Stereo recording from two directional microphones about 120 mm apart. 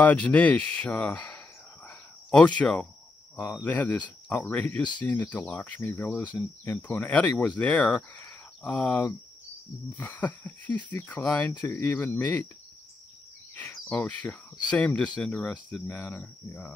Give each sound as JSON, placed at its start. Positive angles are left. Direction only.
{"t": 0.0, "sound": "speech", "side_deg": 15}
{"t": 1.9, "sound": "cricket", "side_deg": 10}
{"t": 3.4, "sound": "speech", "side_deg": 15}
{"t": 13.8, "sound": "speech", "side_deg": 10}